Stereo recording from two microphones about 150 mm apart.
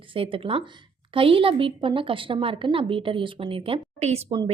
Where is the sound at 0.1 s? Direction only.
35° right (ahead or behind).